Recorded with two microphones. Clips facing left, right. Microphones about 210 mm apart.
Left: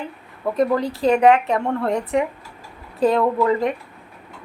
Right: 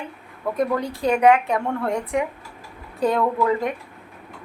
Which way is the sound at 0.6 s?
Centre (ahead or behind).